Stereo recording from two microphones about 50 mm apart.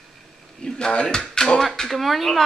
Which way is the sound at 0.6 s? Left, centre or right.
Centre.